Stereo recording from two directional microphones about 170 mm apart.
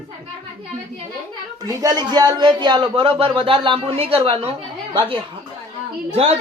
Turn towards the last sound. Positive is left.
turn(degrees=-35)  # may be behind; listen again after turning